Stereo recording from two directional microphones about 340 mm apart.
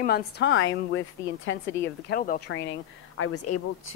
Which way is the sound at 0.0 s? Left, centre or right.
Left.